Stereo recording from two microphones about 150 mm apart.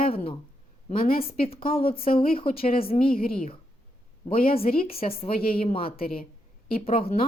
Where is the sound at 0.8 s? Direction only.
70° left (ahead or behind).